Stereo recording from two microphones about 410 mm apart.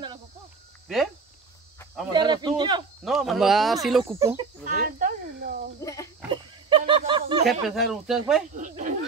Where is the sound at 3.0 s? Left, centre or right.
Centre.